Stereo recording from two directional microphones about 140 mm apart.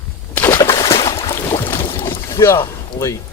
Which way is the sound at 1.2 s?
15° left (ahead or behind).